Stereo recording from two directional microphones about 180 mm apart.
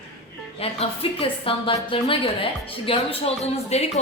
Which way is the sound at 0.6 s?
35° left (ahead or behind).